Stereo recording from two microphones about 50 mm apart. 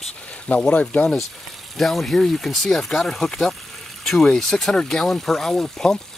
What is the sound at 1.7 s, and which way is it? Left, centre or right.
Speech, centre.